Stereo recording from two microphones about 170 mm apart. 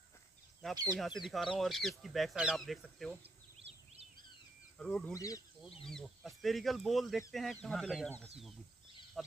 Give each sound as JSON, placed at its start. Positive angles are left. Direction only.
{"t": 0.6, "sound": "speech", "side_deg": 5}
{"t": 3.5, "sound": "a sound", "side_deg": -35}
{"t": 4.7, "sound": "speech", "side_deg": 5}
{"t": 5.1, "sound": "speech", "side_deg": 20}
{"t": 5.9, "sound": "speech", "side_deg": 0}